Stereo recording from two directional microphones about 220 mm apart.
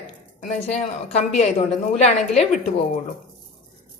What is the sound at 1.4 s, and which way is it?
A woman's voice, 30° left (ahead or behind).